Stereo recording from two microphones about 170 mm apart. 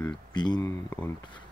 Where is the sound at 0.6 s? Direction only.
15° left (ahead or behind).